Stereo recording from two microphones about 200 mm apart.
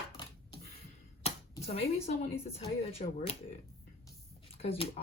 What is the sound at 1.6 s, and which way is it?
Speech, 30° left (ahead or behind).